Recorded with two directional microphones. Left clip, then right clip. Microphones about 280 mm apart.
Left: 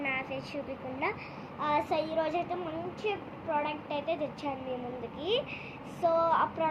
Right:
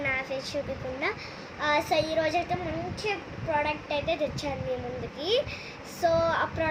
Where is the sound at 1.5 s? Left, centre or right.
Centre.